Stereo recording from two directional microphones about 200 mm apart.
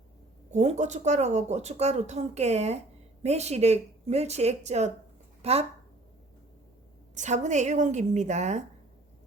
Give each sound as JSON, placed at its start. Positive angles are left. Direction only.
{"t": 0.5, "sound": "speech", "side_deg": -35}
{"t": 7.2, "sound": "speech", "side_deg": -35}